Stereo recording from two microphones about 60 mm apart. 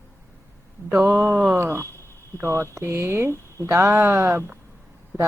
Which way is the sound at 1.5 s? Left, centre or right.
Right.